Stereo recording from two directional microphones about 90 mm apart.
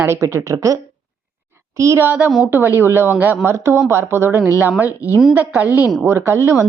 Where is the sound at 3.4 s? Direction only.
30° right (ahead or behind).